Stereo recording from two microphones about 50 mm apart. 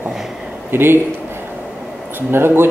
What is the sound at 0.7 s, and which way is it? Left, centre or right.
Speech, right.